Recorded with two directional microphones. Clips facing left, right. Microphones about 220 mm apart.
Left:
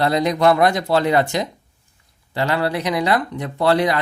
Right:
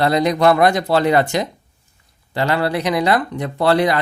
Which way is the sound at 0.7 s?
65° right (ahead or behind).